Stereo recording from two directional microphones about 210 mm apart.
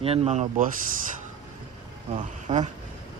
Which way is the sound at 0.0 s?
25° right (ahead or behind).